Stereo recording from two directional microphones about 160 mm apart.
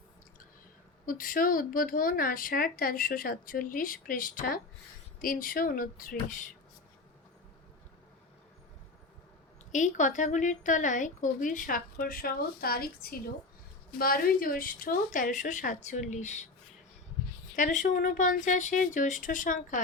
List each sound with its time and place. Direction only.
1.0 s speech: 60° left (ahead or behind)
9.7 s a woman's voice: 50° left (ahead or behind)
17.6 s a woman's voice: 55° left (ahead or behind)